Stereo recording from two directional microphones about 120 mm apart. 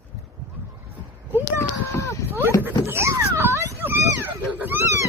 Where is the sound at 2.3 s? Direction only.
20° right (ahead or behind).